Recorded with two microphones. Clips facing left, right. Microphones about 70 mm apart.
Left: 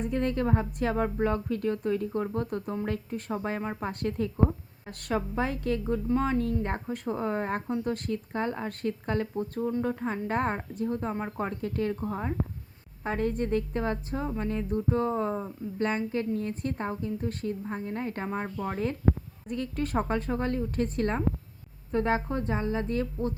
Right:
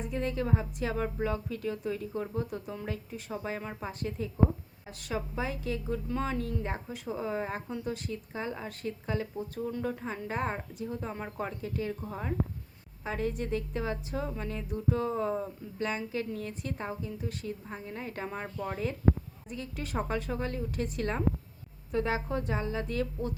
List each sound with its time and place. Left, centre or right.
0.1 s a woman's voice: left
5.9 s a woman's voice: left
6.4 s a woman's voice: left
9.6 s a woman's voice: left
11.9 s a woman's voice: left
15.1 s speech: left
15.8 s a woman's voice: left
19.5 s a woman's voice: left